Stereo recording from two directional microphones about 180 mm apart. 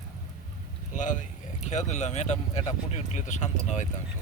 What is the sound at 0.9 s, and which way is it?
Speech, 45° left (ahead or behind).